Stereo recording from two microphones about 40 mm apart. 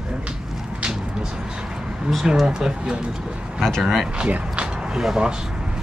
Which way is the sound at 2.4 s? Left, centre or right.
Centre.